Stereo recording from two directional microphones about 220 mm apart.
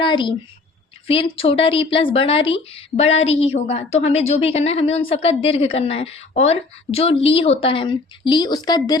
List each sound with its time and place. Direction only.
0.0 s a woman's voice: 20° left (ahead or behind)